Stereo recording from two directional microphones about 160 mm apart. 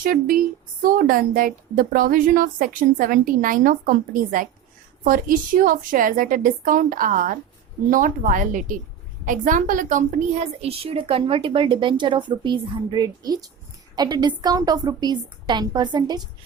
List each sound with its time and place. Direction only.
0.0 s a woman's voice: 60° right (ahead or behind); by 16.2 s 25° right (ahead or behind)